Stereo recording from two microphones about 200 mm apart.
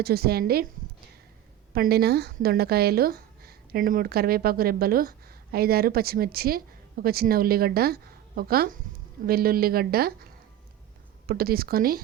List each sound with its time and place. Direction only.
0.0 s speech: 50° right (ahead or behind)
1.7 s speech: 50° right (ahead or behind)
11.3 s speech: 50° right (ahead or behind)